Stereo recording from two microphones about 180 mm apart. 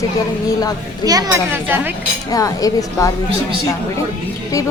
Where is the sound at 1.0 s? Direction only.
20° right (ahead or behind).